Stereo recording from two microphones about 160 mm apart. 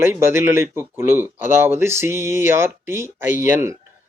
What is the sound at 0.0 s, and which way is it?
Speech, 15° right (ahead or behind).